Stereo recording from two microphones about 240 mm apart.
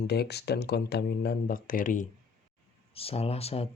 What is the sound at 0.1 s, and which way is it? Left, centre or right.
Speech, left.